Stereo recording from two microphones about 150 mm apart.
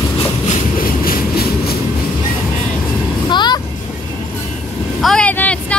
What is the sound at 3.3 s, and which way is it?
Vehicle, 30° left (ahead or behind).